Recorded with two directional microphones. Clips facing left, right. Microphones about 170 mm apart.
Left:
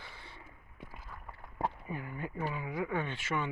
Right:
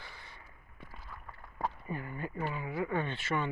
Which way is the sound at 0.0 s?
20° left (ahead or behind).